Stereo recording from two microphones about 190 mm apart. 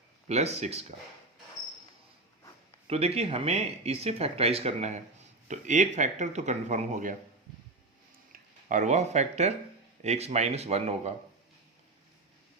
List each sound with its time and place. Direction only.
0.3 s speech: 35° right (ahead or behind)
2.8 s speech: 35° right (ahead or behind)
8.3 s speech: 40° right (ahead or behind)